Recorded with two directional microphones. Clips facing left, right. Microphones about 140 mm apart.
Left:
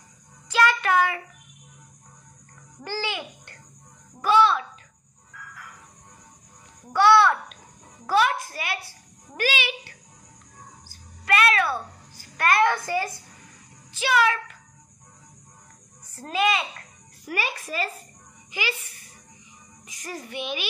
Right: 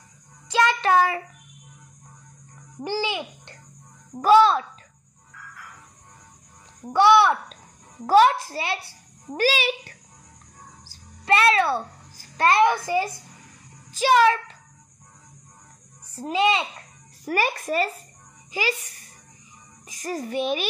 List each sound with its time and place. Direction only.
0.5 s child singing: 20° right (ahead or behind)
2.8 s a child's voice: 15° right (ahead or behind)
4.2 s a child's voice: 35° right (ahead or behind)
6.9 s a child's voice: 20° right (ahead or behind)
8.1 s a child's voice: 35° right (ahead or behind)
10.9 s music: 30° right (ahead or behind)
12.4 s a child's voice: 20° right (ahead or behind)
13.9 s a child's voice: 35° right (ahead or behind)
16.2 s a child's voice: 20° right (ahead or behind)
17.2 s a child's voice: 45° right (ahead or behind)
18.5 s a child's voice: 35° right (ahead or behind)
19.9 s a child's voice: 35° right (ahead or behind)